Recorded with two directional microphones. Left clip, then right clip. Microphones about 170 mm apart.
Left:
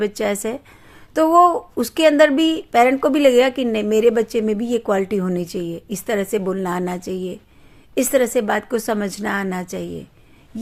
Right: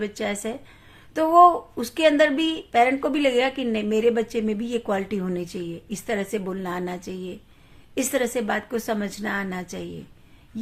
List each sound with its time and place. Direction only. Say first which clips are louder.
0.0 s a woman's voice: left 7 dB; 40° left (ahead or behind)